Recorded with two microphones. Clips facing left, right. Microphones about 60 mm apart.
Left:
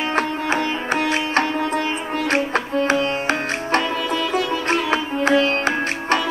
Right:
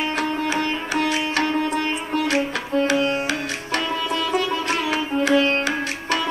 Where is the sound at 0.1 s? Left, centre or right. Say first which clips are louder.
Left 2 dB; left.